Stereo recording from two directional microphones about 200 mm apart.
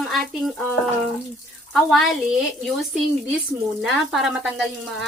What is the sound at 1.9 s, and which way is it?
Speech, centre (ahead or behind).